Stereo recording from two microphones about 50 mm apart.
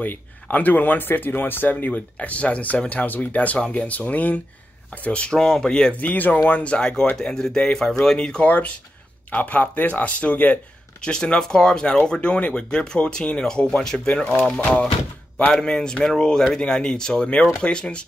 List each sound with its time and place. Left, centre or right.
0.0 s speech: left
1.9 s speech: left
5.9 s speech: left
6.6 s speech: left
11.0 s speech: centre
14.0 s speech: left
15.6 s speech: centre